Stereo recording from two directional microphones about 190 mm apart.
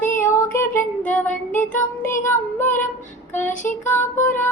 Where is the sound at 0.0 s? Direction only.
10° left (ahead or behind).